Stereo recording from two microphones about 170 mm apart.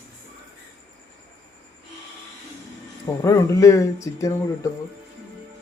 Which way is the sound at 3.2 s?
20° left (ahead or behind).